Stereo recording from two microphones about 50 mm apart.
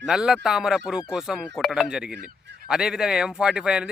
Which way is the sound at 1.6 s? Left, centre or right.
Centre.